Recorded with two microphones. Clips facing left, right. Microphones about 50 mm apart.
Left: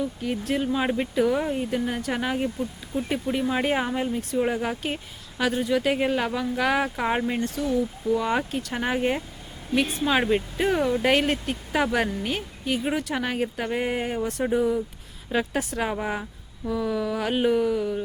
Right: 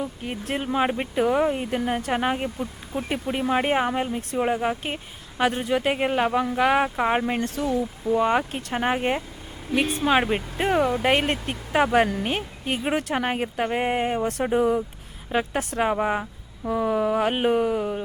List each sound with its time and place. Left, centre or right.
0.0 s speech: right; by 7.3 s centre
7.3 s speech: right
11.0 s speech: centre
14.5 s speech: right
15.3 s speech: right
16.6 s speech: right